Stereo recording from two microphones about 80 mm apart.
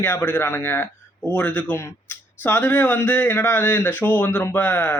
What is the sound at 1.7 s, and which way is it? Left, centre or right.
Speech, left.